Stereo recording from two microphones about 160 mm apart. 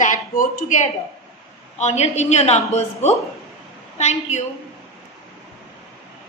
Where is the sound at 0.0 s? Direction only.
50° left (ahead or behind).